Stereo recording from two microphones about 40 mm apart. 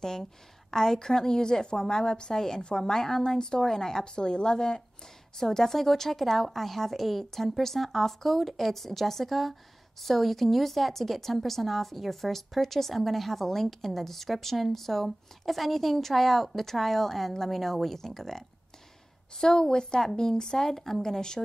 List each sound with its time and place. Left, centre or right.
0.0 s a woman's voice: centre